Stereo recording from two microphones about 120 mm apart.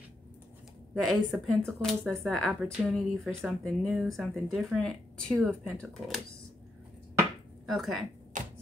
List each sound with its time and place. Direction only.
0.9 s speech: centre (ahead or behind)
7.6 s speech: centre (ahead or behind)
8.3 s a sound: 90° right